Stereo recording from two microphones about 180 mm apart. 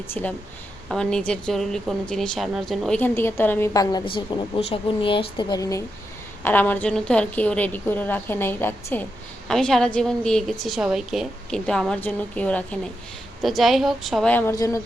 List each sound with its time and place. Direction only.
0.1 s a woman's voice: 10° left (ahead or behind)